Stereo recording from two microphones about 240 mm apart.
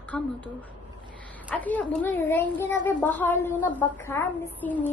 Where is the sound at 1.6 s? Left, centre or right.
Centre.